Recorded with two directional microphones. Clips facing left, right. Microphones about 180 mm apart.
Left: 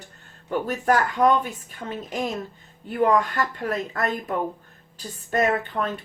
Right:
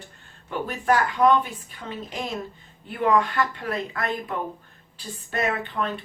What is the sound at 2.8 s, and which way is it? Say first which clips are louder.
Speech: left 1 dB; 45° left (ahead or behind).